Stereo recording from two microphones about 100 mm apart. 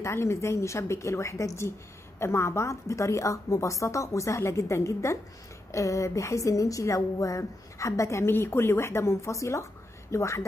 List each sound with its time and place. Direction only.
0.0 s a woman's voice: 25° left (ahead or behind)